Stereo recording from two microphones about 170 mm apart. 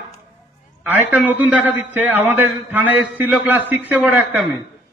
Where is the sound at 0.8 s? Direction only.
10° right (ahead or behind).